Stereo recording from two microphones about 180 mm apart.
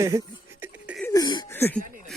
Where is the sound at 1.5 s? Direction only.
10° left (ahead or behind).